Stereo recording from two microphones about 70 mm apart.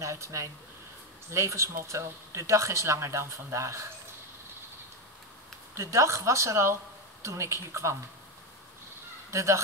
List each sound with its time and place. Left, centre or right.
0.0 s speech: right
5.8 s speech: right
9.3 s speech: right